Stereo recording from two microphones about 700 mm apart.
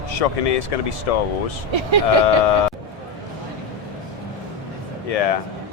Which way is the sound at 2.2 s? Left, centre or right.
Left.